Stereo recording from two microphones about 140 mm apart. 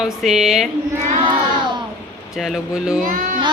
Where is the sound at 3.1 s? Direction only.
75° right (ahead or behind).